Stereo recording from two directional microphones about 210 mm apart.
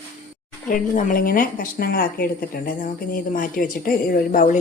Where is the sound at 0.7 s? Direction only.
40° left (ahead or behind).